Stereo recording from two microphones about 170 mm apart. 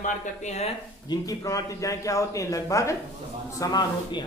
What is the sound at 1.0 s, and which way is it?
A man's voice, 20° left (ahead or behind).